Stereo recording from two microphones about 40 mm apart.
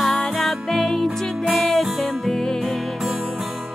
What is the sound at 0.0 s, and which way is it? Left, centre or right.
Music, centre.